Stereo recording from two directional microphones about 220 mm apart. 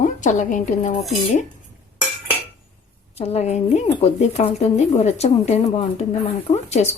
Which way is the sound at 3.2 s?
30° left (ahead or behind).